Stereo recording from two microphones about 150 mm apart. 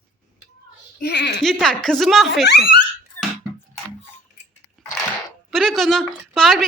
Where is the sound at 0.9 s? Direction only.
90° left.